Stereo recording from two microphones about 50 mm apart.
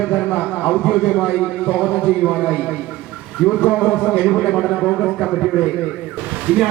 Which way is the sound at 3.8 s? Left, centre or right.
Left.